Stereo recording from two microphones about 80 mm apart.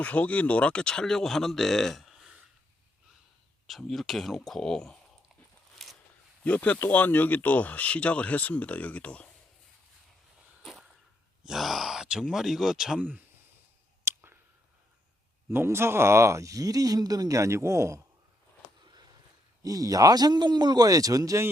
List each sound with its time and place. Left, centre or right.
0.0 s speech: centre
3.7 s speech: centre
5.8 s a sound: centre
6.4 s speech: centre
10.6 s a sound: centre
11.4 s speech: centre
14.0 s a sound: right
15.4 s speech: right
19.6 s a man's voice: right